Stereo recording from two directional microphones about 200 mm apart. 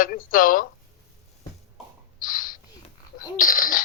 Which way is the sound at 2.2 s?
45° left (ahead or behind).